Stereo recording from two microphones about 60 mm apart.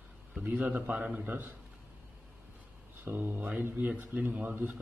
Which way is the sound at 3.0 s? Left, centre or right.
Right.